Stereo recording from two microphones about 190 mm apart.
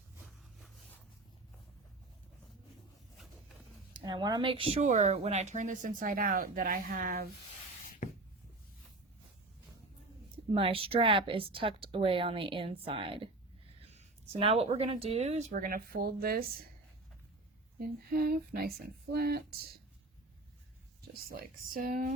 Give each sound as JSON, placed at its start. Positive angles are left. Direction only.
{"t": 3.9, "sound": "speech", "side_deg": -20}
{"t": 7.9, "sound": "spray", "side_deg": 45}
{"t": 10.3, "sound": "speech", "side_deg": -30}
{"t": 17.7, "sound": "speech", "side_deg": -50}
{"t": 21.1, "sound": "speech", "side_deg": -50}